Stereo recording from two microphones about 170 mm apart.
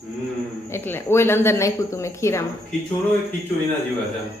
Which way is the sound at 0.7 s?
15° left (ahead or behind).